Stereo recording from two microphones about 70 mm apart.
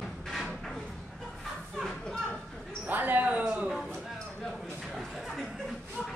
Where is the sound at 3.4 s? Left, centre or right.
Centre.